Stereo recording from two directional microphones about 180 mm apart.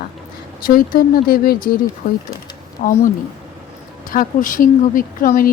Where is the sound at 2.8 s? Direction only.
40° left (ahead or behind).